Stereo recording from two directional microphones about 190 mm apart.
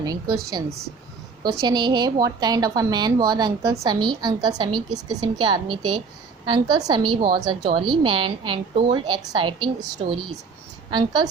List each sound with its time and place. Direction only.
0.0 s a woman's voice: 20° right (ahead or behind)
1.6 s a woman's voice: 20° right (ahead or behind)
10.9 s a woman's voice: 25° right (ahead or behind)